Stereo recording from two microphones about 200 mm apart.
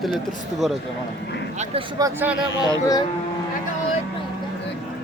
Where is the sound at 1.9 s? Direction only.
15° right (ahead or behind).